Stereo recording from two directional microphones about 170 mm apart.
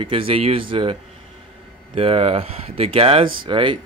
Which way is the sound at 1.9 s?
35° right (ahead or behind).